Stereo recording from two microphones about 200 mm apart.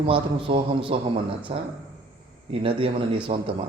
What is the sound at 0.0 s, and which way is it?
Speech, 25° right (ahead or behind).